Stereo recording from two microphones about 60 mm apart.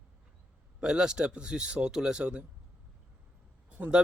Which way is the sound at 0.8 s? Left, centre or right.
Centre.